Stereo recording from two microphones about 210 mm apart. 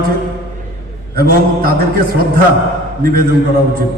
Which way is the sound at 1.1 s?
45° right (ahead or behind).